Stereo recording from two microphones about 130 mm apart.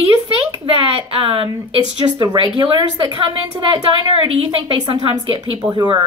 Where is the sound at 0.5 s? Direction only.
45° right (ahead or behind).